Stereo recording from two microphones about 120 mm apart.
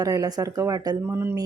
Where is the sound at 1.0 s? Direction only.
20° right (ahead or behind).